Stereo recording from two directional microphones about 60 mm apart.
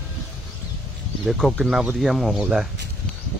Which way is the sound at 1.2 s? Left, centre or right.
Centre.